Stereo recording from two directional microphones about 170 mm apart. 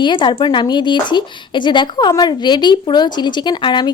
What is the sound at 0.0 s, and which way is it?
Speech, 30° left (ahead or behind).